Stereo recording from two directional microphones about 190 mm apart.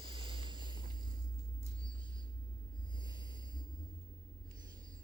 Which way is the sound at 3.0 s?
20° right (ahead or behind).